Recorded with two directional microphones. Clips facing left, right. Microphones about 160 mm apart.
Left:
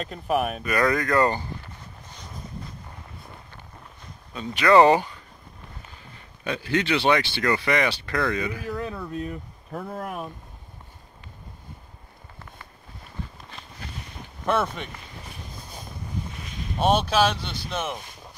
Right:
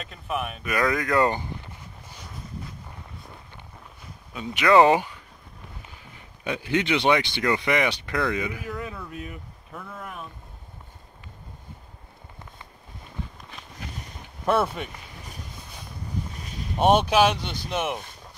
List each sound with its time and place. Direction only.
0.6 s speech: 5° right (ahead or behind)
1.3 s a sound: 15° right (ahead or behind)
4.0 s speech: 10° right (ahead or behind)
8.6 s speech: 30° left (ahead or behind)
10.0 s speech: 50° left (ahead or behind)
14.4 s speech: 5° right (ahead or behind)
16.7 s speech: 15° right (ahead or behind)